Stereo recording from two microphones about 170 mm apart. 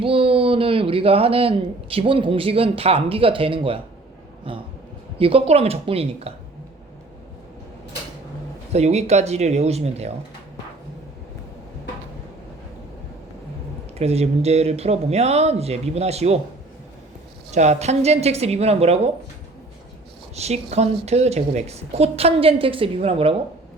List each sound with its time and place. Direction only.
0.0 s speech: 35° right (ahead or behind)
8.7 s speech: 40° right (ahead or behind)
14.0 s speech: 35° right (ahead or behind)
17.5 s speech: 40° right (ahead or behind)
20.3 s speech: 40° right (ahead or behind)